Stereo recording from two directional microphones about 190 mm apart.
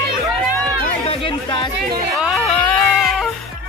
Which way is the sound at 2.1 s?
Centre (ahead or behind).